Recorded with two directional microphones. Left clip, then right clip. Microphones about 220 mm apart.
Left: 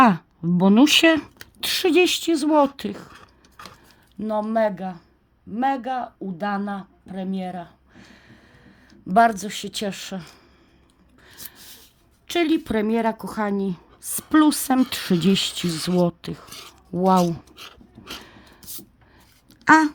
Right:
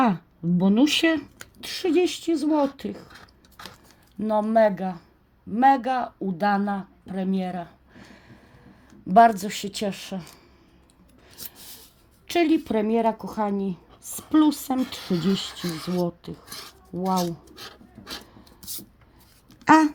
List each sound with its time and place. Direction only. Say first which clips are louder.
0.0 s speech: left 7 dB; 30° left (ahead or behind)
4.2 s speech: right 2 dB; 5° left (ahead or behind)
12.3 s speech: even; 15° left (ahead or behind); by 16.5 s 30° left (ahead or behind)
16.9 s speech: left 7 dB; 40° left (ahead or behind)
17.5 s speech: even; centre (ahead or behind)
18.2 s a sound: left 3 dB; 30° left (ahead or behind)
19.6 s a sound: left 2 dB; 10° left (ahead or behind)